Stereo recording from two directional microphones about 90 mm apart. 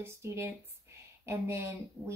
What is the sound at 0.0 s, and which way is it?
Speech, 30° right (ahead or behind).